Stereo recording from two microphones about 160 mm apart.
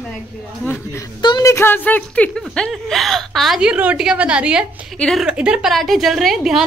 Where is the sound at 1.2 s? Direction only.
25° left (ahead or behind).